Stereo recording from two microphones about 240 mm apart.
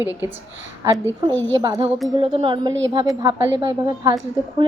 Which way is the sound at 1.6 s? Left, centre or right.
Right.